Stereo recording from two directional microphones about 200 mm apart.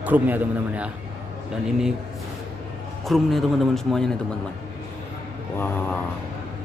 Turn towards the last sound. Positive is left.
turn(degrees=10)  # may be behind; listen again after turning